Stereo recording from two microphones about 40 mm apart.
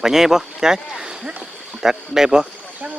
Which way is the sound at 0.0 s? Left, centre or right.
Centre.